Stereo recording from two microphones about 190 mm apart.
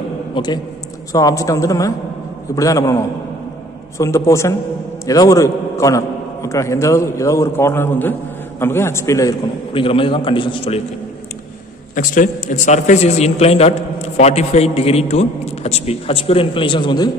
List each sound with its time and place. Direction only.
0.3 s a man's voice: 20° left (ahead or behind)
4.0 s a man's voice: 15° left (ahead or behind)
9.7 s a man's voice: 30° left (ahead or behind)
11.9 s a man's voice: 45° left (ahead or behind); by 17.1 s 20° left (ahead or behind)